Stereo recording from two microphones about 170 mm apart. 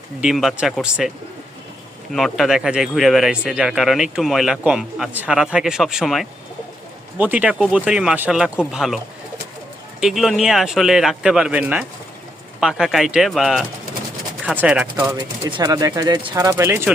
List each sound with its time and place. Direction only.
0.2 s speech: centre (ahead or behind)
2.1 s speech: centre (ahead or behind)
10.0 s speech: centre (ahead or behind)
15.1 s speech: 25° right (ahead or behind)